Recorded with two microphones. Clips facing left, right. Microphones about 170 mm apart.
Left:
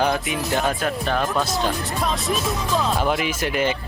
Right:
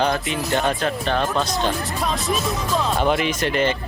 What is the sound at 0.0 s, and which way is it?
Speech, 5° left (ahead or behind).